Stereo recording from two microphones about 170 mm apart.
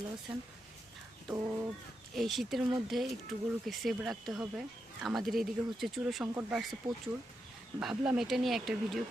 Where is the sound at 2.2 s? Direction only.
Centre (ahead or behind).